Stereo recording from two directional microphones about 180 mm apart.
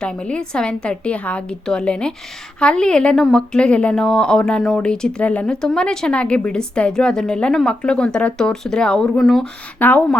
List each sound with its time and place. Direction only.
0.0 s a woman's voice: 5° left (ahead or behind)